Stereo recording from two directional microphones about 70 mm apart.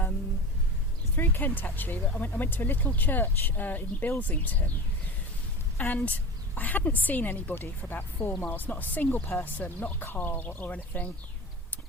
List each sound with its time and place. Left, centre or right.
1.1 s speech: left
5.7 s a woman's voice: left